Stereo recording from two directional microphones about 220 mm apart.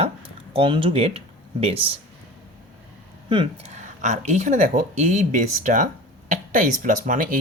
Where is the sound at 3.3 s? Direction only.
25° right (ahead or behind).